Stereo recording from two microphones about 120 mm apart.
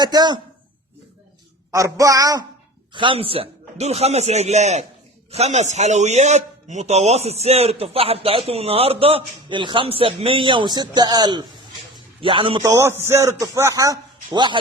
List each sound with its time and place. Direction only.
0.0 s a woman's voice: 35° right (ahead or behind)
1.7 s a man's voice: 25° right (ahead or behind)
2.9 s a man's voice: 45° right (ahead or behind)
12.2 s a man's voice: 45° right (ahead or behind)
12.6 s a man's voice: 20° right (ahead or behind); by 14.6 s 40° right (ahead or behind)